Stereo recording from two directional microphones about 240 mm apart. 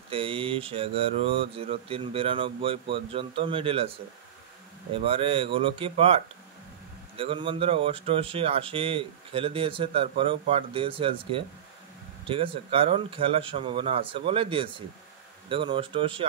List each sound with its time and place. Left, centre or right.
0.1 s speech: right
4.9 s speech: right